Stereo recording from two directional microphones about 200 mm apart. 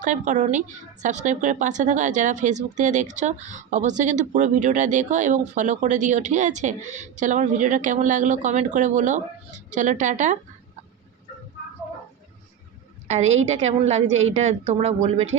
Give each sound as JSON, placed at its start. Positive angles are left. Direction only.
{"t": 0.0, "sound": "speech", "side_deg": -40}
{"t": 13.1, "sound": "a woman's voice", "side_deg": -30}